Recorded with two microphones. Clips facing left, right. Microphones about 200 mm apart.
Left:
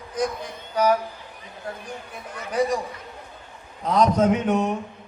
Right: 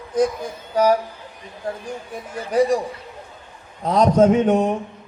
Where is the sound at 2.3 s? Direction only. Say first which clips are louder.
Right 5 dB; 30° right (ahead or behind).